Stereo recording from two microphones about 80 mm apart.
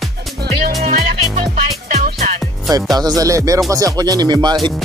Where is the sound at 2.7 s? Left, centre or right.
Right.